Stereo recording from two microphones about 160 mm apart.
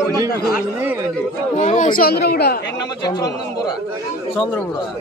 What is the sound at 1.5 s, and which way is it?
Speech, 55° left (ahead or behind).